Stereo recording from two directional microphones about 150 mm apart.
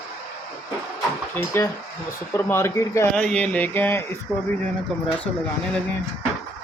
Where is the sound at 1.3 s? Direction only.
15° left (ahead or behind).